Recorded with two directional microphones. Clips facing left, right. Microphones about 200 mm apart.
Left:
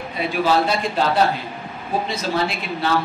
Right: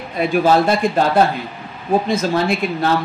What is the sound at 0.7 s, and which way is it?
A woman's voice, 50° right (ahead or behind).